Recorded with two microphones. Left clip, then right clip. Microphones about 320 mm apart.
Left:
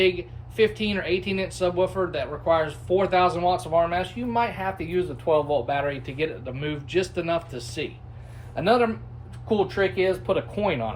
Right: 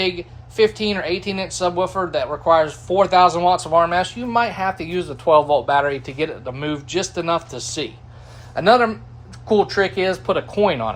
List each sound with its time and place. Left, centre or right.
0.0 s a woman's voice: centre